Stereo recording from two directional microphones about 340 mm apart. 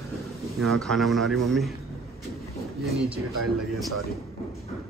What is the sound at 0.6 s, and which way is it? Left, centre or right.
Speech, centre.